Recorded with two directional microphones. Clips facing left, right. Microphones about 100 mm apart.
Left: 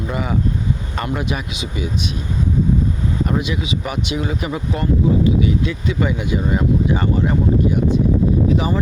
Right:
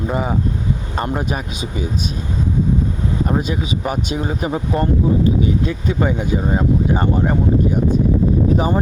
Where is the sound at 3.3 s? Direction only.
40° right (ahead or behind).